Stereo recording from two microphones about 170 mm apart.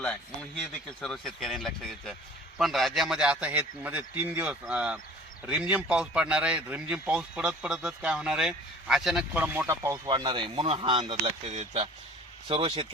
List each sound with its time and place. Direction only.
0.0 s speech: 5° left (ahead or behind); by 11.2 s 30° right (ahead or behind)
11.4 s speech: 40° right (ahead or behind)
12.5 s speech: 30° right (ahead or behind)